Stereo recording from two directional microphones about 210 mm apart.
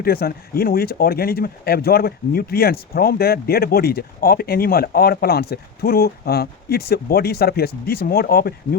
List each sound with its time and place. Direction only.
0.0 s speech: 45° left (ahead or behind)